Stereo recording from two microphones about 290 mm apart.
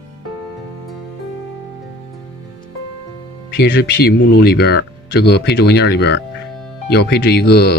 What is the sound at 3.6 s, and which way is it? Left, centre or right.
Speech, left.